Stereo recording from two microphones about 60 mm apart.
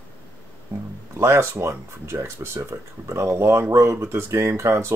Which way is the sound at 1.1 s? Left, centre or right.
Right.